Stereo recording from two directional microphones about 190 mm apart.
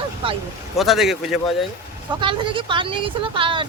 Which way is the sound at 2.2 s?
25° right (ahead or behind).